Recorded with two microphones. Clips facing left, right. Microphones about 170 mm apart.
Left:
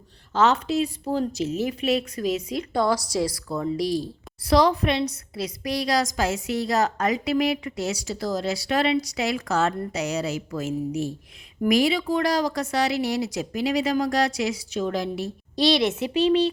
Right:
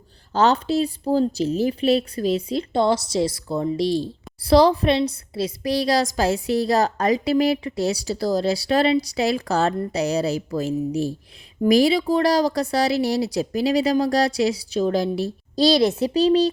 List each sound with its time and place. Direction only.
0.3 s a woman's voice: 35° right (ahead or behind)